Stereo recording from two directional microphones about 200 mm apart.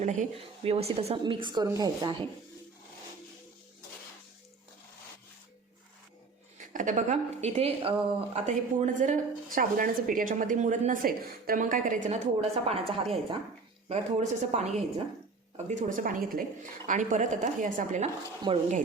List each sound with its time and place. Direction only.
0.0 s a woman's voice: 35° right (ahead or behind); by 2.1 s 20° right (ahead or behind)
6.7 s a woman's voice: 40° right (ahead or behind)